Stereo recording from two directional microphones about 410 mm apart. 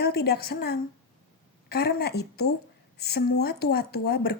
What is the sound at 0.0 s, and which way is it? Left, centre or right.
A woman's voice, left.